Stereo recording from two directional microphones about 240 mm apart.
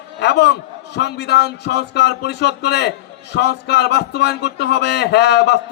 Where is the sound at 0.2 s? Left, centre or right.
Left.